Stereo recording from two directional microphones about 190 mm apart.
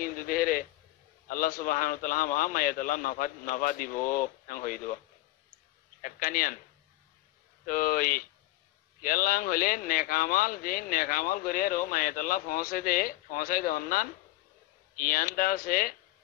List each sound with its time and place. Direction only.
0.0 s a sound: 50° left (ahead or behind)
1.3 s speech: 45° left (ahead or behind)
6.0 s speech: 45° left (ahead or behind)
7.6 s speech: 50° left (ahead or behind)